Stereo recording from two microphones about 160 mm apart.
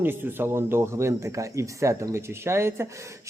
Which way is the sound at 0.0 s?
15° right (ahead or behind).